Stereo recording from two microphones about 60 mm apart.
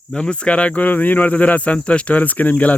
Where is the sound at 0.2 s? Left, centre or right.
Centre.